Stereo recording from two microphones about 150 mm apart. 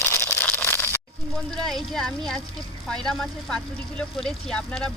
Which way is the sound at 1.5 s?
Centre (ahead or behind).